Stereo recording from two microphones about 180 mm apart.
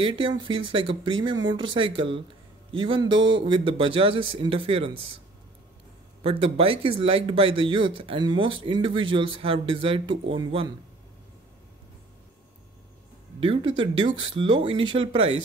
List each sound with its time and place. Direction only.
0.0 s speech: 30° right (ahead or behind)
6.2 s speech: 30° right (ahead or behind)
13.4 s speech: 30° right (ahead or behind)